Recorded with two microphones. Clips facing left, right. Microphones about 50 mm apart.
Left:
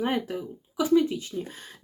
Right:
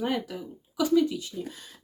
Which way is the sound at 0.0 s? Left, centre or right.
Left.